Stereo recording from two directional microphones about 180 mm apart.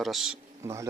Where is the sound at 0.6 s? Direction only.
15° right (ahead or behind).